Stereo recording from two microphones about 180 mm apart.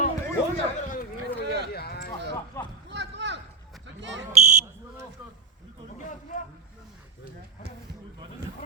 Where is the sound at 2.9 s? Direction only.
75° right (ahead or behind).